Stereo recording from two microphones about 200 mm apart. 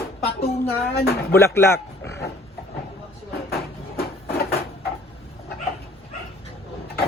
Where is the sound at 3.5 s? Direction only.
50° left (ahead or behind).